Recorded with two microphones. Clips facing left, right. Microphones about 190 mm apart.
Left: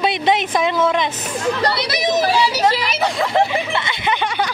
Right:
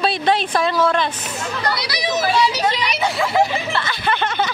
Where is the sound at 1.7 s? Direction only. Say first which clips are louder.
Left 4 dB; 50° left (ahead or behind).